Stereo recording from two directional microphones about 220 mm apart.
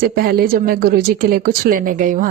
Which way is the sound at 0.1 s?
45° right (ahead or behind).